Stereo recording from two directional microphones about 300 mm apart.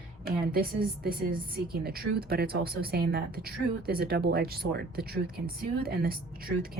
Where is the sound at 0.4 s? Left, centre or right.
Right.